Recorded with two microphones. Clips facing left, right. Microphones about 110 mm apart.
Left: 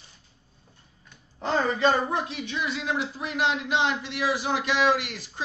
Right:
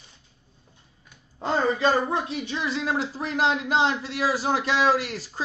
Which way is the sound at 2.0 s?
30° right (ahead or behind).